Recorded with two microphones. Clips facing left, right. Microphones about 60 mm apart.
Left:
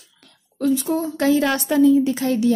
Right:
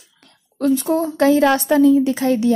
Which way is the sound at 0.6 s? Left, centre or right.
Right.